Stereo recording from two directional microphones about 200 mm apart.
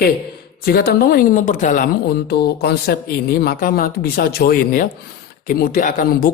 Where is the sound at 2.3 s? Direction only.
50° left (ahead or behind).